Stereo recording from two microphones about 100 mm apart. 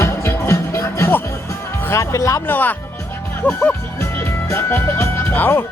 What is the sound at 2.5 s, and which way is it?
Speech, 20° left (ahead or behind).